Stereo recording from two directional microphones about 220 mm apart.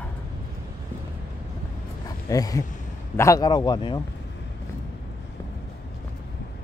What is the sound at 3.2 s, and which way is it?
Speech, 15° left (ahead or behind).